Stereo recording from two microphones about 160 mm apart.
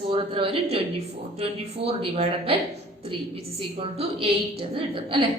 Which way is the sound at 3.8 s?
35° right (ahead or behind).